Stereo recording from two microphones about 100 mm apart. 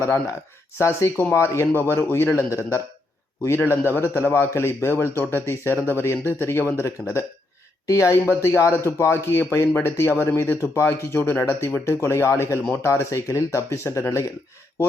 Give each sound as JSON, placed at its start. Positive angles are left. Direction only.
{"t": 0.8, "sound": "speech", "side_deg": 25}